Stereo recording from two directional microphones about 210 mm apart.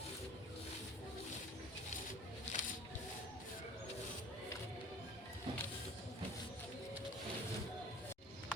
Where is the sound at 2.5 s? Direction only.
35° left (ahead or behind).